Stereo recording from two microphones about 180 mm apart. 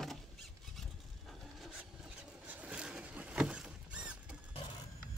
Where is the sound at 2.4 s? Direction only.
10° right (ahead or behind).